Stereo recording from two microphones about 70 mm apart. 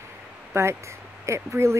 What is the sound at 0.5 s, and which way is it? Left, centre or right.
Speech, right.